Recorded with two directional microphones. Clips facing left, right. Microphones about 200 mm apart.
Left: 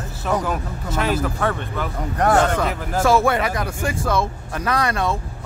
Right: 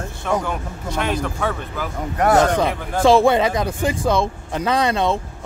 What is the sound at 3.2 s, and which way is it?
Speech, 20° right (ahead or behind).